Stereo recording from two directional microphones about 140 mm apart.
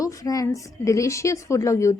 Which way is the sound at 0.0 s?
25° left (ahead or behind).